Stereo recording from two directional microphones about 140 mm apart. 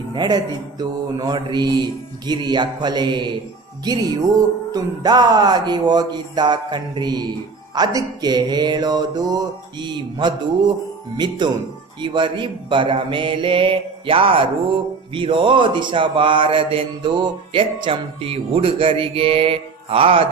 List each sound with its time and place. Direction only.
0.1 s a man's voice: 30° right (ahead or behind)
7.8 s mantra: 30° right (ahead or behind)
11.9 s a man's voice: 35° right (ahead or behind)